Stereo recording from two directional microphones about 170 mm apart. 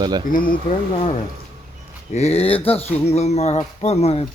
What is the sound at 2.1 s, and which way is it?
Speech, 35° left (ahead or behind).